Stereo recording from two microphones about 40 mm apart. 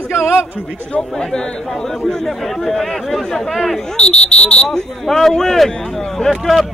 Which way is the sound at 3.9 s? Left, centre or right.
Left.